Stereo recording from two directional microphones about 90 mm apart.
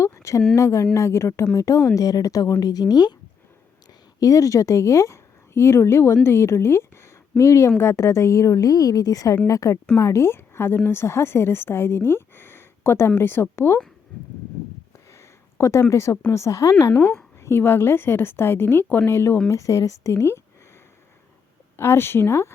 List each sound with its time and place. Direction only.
0.0 s a sound: 35° left (ahead or behind)
0.5 s a woman's voice: 35° left (ahead or behind)
4.2 s a woman's voice: 40° left (ahead or behind)
14.9 s a sound: 30° left (ahead or behind)
15.9 s a woman's voice: 30° left (ahead or behind)
21.8 s speech: 25° left (ahead or behind)